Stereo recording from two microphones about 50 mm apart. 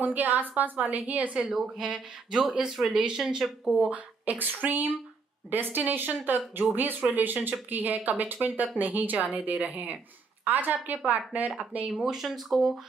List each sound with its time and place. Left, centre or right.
0.0 s a woman's voice: right
1.4 s speech: centre
3.8 s a woman's voice: right
11.9 s speech: centre